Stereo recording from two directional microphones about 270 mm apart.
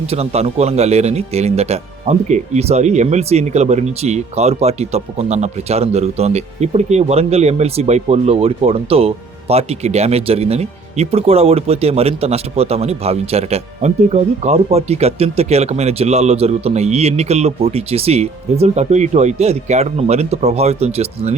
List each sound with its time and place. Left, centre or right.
0.1 s speech: right